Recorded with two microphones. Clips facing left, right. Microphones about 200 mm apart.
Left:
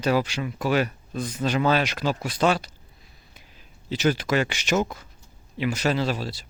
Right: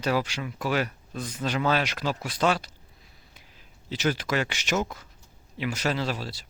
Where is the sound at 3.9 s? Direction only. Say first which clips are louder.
Left 4 dB; 5° left (ahead or behind).